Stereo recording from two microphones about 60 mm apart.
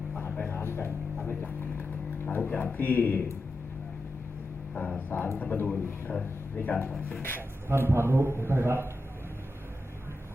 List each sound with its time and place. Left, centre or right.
0.3 s music: left
1.3 s a sound: left
2.7 s speech: left
4.8 s speech: left
7.7 s a man's voice: right